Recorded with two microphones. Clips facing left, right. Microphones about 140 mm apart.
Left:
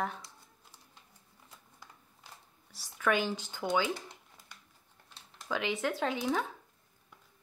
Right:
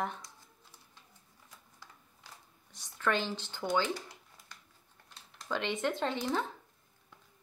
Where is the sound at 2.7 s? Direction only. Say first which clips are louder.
Left 2 dB; 10° left (ahead or behind).